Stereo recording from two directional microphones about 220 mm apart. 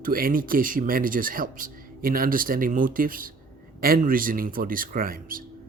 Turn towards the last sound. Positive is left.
turn(degrees=-40)  # may be behind; listen again after turning